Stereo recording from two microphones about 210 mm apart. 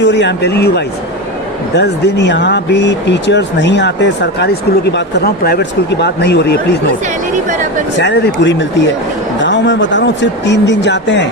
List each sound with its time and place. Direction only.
0.0 s speech: 55° left (ahead or behind)
1.7 s speech: 55° left (ahead or behind)
8.0 s speech: 60° left (ahead or behind)